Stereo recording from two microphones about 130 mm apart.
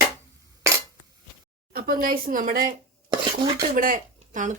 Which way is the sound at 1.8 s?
90° right.